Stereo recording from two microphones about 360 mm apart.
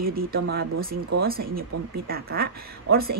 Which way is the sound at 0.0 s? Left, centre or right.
Right.